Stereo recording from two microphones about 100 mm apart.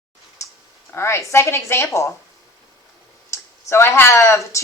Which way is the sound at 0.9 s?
25° left (ahead or behind).